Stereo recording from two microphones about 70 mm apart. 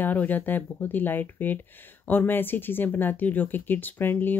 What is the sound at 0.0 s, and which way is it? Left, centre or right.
Speech, left.